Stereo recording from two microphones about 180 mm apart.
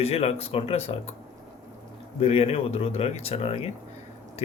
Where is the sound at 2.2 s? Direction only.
35° left (ahead or behind).